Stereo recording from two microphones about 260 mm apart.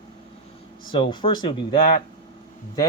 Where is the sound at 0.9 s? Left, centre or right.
Centre.